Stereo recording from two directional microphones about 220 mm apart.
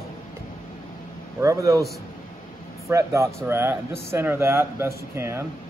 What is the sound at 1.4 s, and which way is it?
Speech, 15° right (ahead or behind).